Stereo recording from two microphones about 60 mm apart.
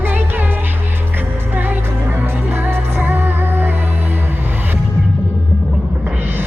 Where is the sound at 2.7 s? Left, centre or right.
Right.